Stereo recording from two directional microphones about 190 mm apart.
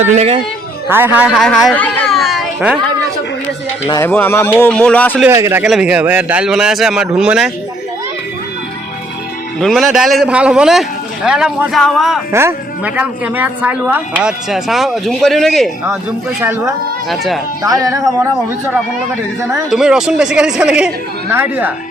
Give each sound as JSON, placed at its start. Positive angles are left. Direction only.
{"t": 0.0, "sound": "a woman's voice", "side_deg": -35}
{"t": 0.9, "sound": "speech", "side_deg": -10}
{"t": 3.8, "sound": "speech", "side_deg": 15}
{"t": 5.3, "sound": "speech", "side_deg": -15}
{"t": 9.6, "sound": "speech", "side_deg": 0}
{"t": 12.3, "sound": "speech", "side_deg": -15}
{"t": 16.4, "sound": "speech", "side_deg": -10}
{"t": 17.1, "sound": "speech", "side_deg": 0}
{"t": 17.6, "sound": "speech", "side_deg": -20}
{"t": 19.5, "sound": "speech", "side_deg": -5}